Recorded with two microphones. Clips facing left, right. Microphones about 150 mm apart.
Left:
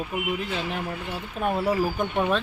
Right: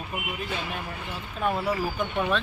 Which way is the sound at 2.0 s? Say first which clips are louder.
Left 2 dB; 40° left (ahead or behind).